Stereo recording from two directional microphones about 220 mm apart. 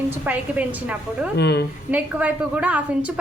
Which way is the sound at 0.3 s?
5° right (ahead or behind).